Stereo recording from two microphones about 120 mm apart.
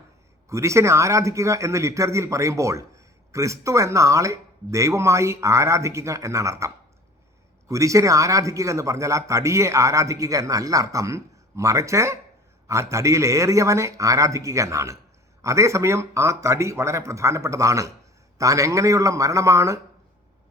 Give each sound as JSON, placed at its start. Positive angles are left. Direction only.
{"t": 0.4, "sound": "a man's voice", "side_deg": -25}
{"t": 7.7, "sound": "a man's voice", "side_deg": -25}